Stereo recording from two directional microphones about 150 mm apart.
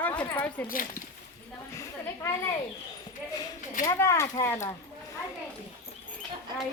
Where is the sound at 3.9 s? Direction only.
20° left (ahead or behind).